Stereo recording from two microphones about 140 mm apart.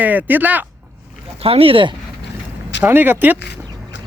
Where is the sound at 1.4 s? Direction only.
40° right (ahead or behind).